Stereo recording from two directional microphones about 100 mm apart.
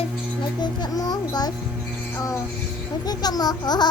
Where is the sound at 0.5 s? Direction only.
45° left (ahead or behind).